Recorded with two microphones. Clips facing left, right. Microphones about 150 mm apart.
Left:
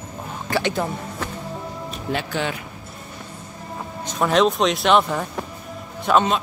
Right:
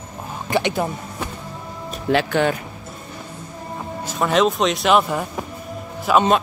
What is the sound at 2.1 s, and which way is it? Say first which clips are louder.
Speech: right 7 dB; 90° right.